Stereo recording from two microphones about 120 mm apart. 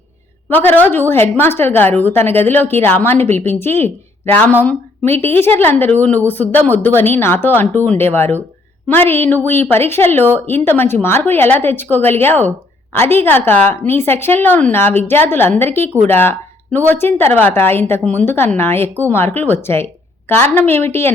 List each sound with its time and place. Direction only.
0.5 s a woman's voice: 15° left (ahead or behind)